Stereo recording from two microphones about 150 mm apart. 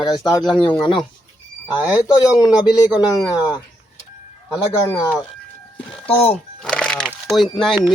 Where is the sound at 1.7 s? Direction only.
10° right (ahead or behind).